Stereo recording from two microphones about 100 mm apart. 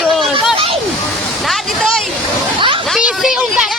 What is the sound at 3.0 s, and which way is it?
Speech, 5° right (ahead or behind).